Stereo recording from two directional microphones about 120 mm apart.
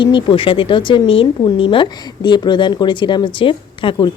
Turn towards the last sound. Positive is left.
turn(degrees=45)  # may be behind; listen again after turning